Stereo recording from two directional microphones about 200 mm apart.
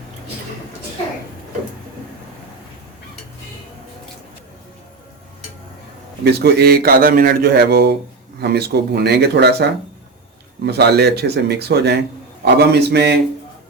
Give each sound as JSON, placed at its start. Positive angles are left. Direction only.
{"t": 6.2, "sound": "a man's voice", "side_deg": -50}
{"t": 10.7, "sound": "speech", "side_deg": -55}